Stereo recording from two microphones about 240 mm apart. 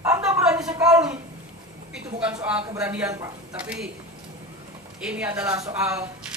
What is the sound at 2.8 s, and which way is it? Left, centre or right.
Speech, centre.